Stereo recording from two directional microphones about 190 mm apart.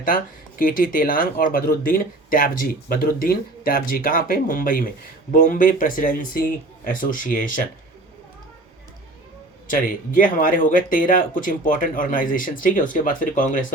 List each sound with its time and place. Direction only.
0.0 s speech: 45° left (ahead or behind)
9.6 s speech: 45° left (ahead or behind)